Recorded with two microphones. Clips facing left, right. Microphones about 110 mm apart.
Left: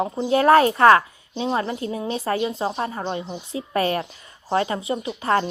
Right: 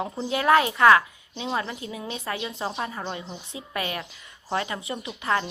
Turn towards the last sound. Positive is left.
turn(degrees=30)  # may be behind; listen again after turning